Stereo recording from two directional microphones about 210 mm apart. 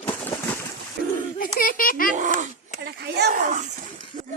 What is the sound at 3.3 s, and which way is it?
Speech, 35° right (ahead or behind).